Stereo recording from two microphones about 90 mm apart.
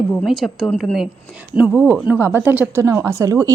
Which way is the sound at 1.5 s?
15° right (ahead or behind).